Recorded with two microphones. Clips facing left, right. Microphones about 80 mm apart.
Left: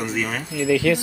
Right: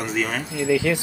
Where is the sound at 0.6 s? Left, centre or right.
Centre.